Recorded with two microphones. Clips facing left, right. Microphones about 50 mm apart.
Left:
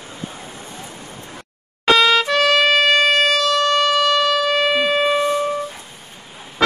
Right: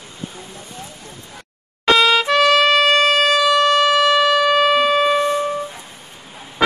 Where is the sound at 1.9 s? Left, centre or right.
Centre.